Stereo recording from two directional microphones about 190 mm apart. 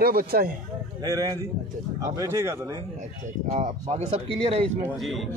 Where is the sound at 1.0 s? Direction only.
20° right (ahead or behind).